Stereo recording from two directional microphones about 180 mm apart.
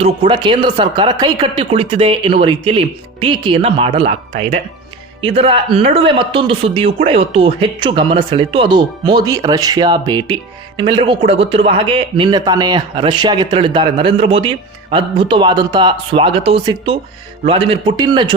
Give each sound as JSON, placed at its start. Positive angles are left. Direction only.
{"t": 0.0, "sound": "speech", "side_deg": -30}
{"t": 5.2, "sound": "speech", "side_deg": -30}